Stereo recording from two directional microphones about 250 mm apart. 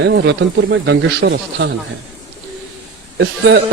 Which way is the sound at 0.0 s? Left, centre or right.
Right.